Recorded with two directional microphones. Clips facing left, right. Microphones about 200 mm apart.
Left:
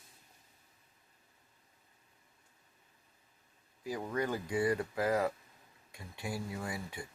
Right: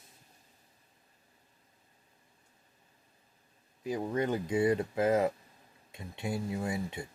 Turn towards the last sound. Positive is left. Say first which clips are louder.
# right 6 dB
turn(degrees=-25)  # may be behind; listen again after turning